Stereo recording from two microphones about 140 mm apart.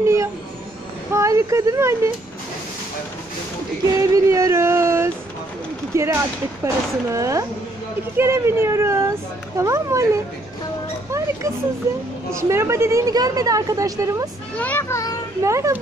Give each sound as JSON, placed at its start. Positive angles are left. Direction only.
{"t": 0.0, "sound": "a sound", "side_deg": -20}
{"t": 1.1, "sound": "a woman's voice", "side_deg": -20}
{"t": 3.9, "sound": "a sound", "side_deg": -25}
{"t": 5.9, "sound": "a woman's voice", "side_deg": -20}
{"t": 12.4, "sound": "a woman's voice", "side_deg": -20}
{"t": 14.6, "sound": "a child's voice", "side_deg": 15}
{"t": 15.4, "sound": "a woman's voice", "side_deg": -20}